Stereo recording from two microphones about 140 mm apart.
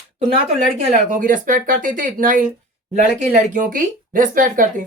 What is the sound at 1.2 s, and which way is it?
Speech, 80° right.